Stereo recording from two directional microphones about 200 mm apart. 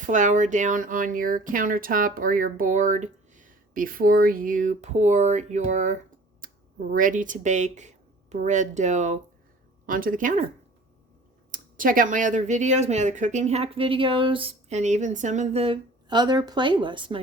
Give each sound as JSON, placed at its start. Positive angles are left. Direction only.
{"t": 0.0, "sound": "speech", "side_deg": -40}
{"t": 6.4, "sound": "a sound", "side_deg": -45}
{"t": 6.9, "sound": "speech", "side_deg": -40}
{"t": 11.5, "sound": "speech", "side_deg": -45}